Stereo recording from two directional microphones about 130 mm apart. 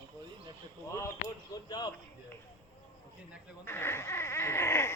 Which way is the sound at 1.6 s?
30° left (ahead or behind).